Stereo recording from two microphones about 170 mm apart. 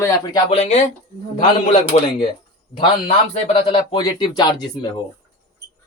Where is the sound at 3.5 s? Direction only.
30° left (ahead or behind).